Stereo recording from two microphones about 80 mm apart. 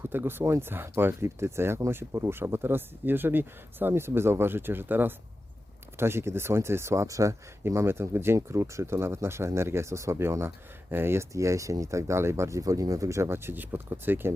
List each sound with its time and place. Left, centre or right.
0.0 s speech: right